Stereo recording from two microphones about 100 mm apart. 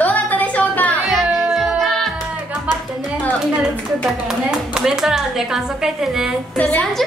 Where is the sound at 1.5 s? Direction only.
Centre (ahead or behind).